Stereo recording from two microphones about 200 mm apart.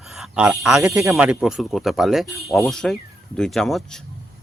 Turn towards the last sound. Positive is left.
turn(degrees=0)  # may be behind; listen again after turning